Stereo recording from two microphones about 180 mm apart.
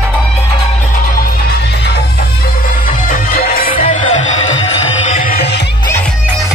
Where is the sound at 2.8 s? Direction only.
50° left (ahead or behind).